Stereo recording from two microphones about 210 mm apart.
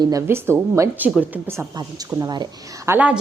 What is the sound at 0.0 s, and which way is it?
A woman's voice, 15° right (ahead or behind).